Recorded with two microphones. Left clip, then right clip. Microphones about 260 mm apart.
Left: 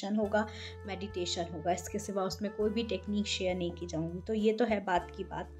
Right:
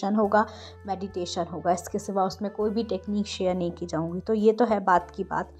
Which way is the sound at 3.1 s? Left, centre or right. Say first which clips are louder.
Right 6 dB; centre.